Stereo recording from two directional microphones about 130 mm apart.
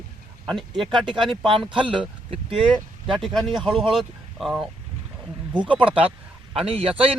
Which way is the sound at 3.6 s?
40° right (ahead or behind).